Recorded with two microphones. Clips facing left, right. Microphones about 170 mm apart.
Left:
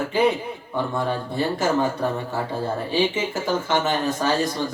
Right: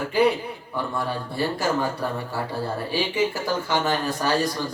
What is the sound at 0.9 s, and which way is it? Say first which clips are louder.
Speech: left 2 dB; 20° left (ahead or behind).